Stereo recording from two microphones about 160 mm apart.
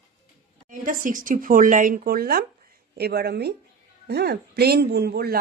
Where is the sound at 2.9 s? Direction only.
85° right.